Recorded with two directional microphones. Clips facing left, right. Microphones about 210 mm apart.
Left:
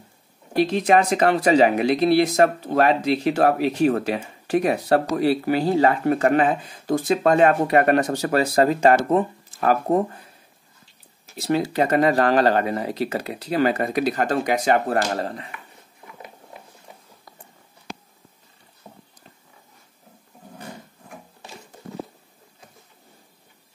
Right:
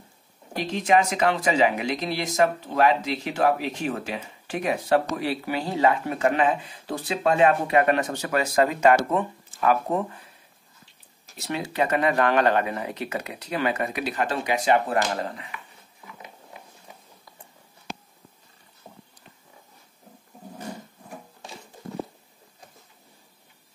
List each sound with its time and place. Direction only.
1.4 s speech: 35° left (ahead or behind)
2.0 s speech: 55° left (ahead or behind)
11.3 s speech: 35° left (ahead or behind)